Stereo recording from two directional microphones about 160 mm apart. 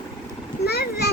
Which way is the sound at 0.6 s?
80° left.